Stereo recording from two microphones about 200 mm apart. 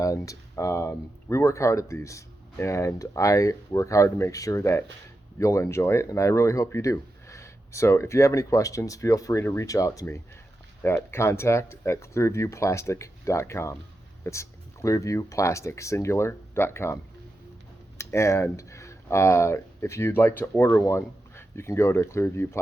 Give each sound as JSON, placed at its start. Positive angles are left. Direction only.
{"t": 0.0, "sound": "speech", "side_deg": 15}